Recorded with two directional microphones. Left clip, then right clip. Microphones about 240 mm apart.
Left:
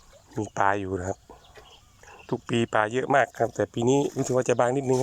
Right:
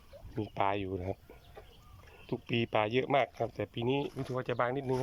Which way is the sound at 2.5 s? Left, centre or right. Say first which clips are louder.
Left 7 dB; left.